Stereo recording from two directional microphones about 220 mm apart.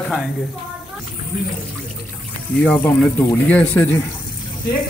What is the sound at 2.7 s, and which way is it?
Speech, 10° left (ahead or behind).